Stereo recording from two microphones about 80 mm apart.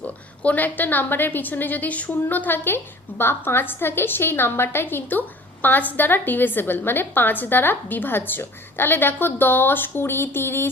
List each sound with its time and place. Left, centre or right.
0.4 s a woman's voice: left